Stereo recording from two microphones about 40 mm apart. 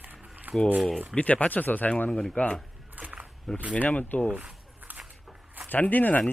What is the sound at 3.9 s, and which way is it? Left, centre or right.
Speech, left.